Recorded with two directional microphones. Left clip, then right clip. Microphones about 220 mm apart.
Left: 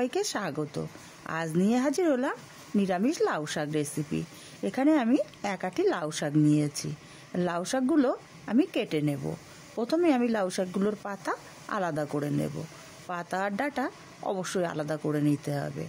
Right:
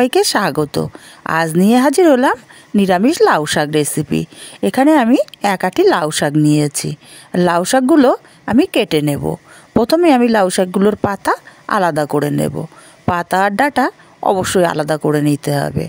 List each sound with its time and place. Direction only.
0.0 s speech: 40° right (ahead or behind)